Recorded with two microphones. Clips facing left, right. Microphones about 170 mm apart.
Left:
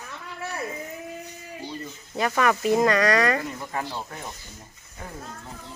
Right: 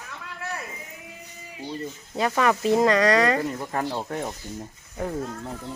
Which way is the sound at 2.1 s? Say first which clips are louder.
Right 1 dB; 25° right (ahead or behind).